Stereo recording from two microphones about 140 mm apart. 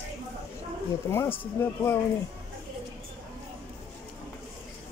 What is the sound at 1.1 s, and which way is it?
Speech, 15° left (ahead or behind).